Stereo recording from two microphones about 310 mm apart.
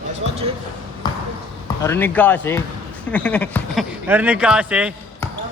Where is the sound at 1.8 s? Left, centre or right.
Centre.